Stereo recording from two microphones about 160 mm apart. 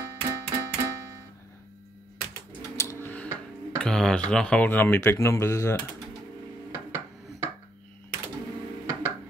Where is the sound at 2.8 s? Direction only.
15° left (ahead or behind).